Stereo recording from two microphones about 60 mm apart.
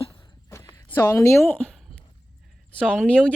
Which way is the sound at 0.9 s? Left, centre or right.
Left.